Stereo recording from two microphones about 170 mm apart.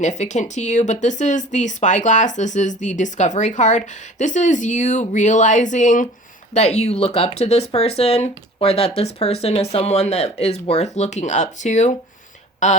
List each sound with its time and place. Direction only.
0.0 s speech: 45° left (ahead or behind)